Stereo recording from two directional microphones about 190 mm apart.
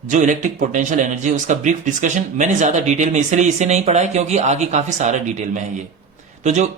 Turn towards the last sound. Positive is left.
turn(degrees=-40)  # may be behind; listen again after turning